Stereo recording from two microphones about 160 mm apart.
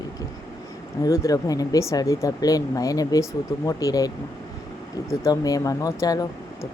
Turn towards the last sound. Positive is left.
turn(degrees=20)  # may be behind; listen again after turning